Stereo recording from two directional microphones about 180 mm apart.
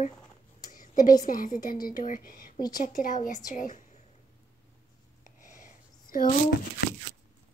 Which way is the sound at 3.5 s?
45° left (ahead or behind).